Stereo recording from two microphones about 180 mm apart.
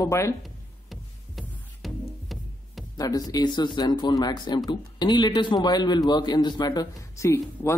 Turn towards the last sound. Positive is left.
turn(degrees=15)  # may be behind; listen again after turning